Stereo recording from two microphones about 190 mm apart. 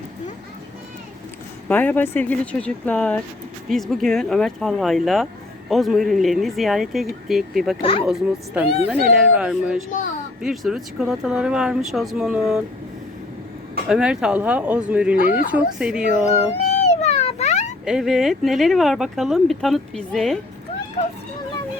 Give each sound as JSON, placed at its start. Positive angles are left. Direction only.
{"t": 1.6, "sound": "speech", "side_deg": 10}
{"t": 7.8, "sound": "speech", "side_deg": 30}
{"t": 8.0, "sound": "speech", "side_deg": -5}
{"t": 9.9, "sound": "speech", "side_deg": 45}
{"t": 10.4, "sound": "speech", "side_deg": 0}
{"t": 13.8, "sound": "speech", "side_deg": -5}
{"t": 16.6, "sound": "a sound", "side_deg": 35}
{"t": 17.8, "sound": "speech", "side_deg": 0}